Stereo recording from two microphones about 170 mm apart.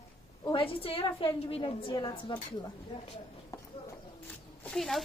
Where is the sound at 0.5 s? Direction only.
30° left (ahead or behind).